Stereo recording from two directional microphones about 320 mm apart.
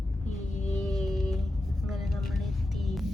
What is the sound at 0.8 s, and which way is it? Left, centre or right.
Music, centre.